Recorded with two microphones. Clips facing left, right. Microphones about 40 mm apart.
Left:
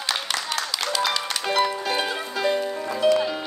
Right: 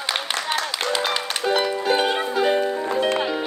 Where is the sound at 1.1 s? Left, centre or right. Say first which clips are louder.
Right 3 dB; right.